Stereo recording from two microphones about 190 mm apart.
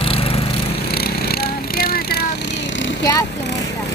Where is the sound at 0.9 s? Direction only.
55° left (ahead or behind).